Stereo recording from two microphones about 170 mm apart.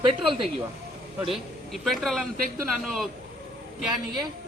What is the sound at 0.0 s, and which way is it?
Speech, 30° right (ahead or behind).